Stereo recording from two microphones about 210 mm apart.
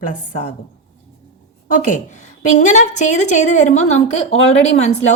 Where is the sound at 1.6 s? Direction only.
40° left (ahead or behind).